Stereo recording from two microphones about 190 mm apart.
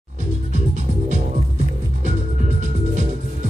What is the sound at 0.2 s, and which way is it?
Music, 40° right (ahead or behind).